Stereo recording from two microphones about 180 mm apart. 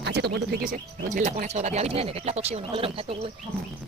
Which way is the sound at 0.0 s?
70° right (ahead or behind).